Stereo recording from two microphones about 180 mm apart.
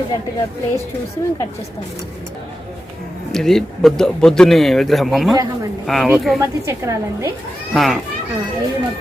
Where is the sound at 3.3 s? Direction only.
Centre (ahead or behind).